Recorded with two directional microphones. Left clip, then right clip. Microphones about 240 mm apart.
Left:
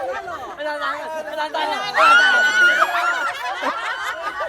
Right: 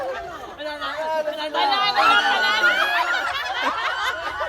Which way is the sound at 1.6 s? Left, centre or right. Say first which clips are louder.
Even; centre.